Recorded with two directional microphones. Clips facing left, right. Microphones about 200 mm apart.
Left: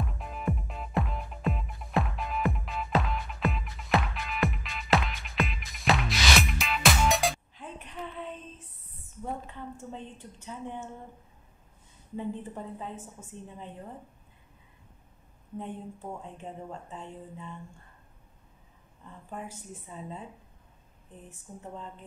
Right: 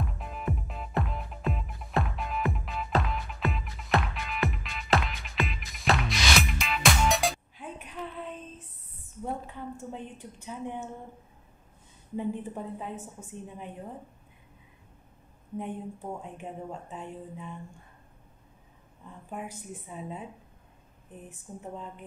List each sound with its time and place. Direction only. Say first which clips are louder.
0.0 s music: left 1 dB; centre (ahead or behind)
9.2 s a sound: right 2 dB; 10° right (ahead or behind)
12.2 s speech: right 3 dB; 10° right (ahead or behind)
15.5 s speech: right 3 dB; 10° right (ahead or behind)
19.3 s speech: right 2 dB; 15° right (ahead or behind)
21.5 s speech: right 3 dB; 15° right (ahead or behind)